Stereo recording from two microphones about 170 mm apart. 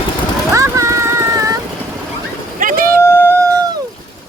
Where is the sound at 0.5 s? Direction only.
15° right (ahead or behind).